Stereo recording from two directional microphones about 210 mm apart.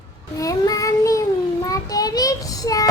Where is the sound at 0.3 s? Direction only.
15° left (ahead or behind).